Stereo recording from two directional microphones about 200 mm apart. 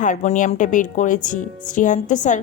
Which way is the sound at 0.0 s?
40° left (ahead or behind).